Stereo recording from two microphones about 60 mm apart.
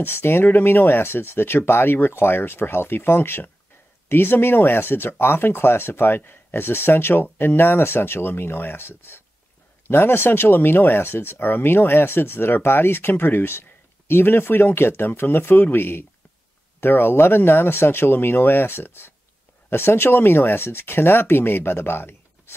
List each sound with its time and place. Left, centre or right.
0.0 s speech: left